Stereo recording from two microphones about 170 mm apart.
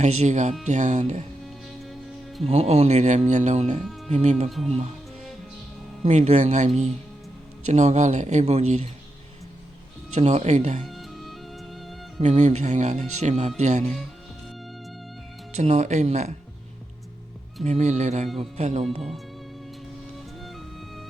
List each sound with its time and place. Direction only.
0.0 s speech: 45° right (ahead or behind)
1.8 s music: centre (ahead or behind)
2.4 s speech: 40° right (ahead or behind)
3.8 s music: centre (ahead or behind)
4.1 s speech: 40° right (ahead or behind)
4.4 s speech: centre (ahead or behind)
6.1 s speech: 45° right (ahead or behind)
10.2 s speech: 40° right (ahead or behind)
10.8 s music: centre (ahead or behind)
12.2 s speech: 45° right (ahead or behind)
15.5 s speech: 40° right (ahead or behind)
17.6 s speech: 45° right (ahead or behind)
20.4 s music: centre (ahead or behind)